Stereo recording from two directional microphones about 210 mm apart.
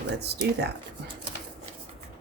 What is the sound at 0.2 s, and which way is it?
Speech, 50° right (ahead or behind).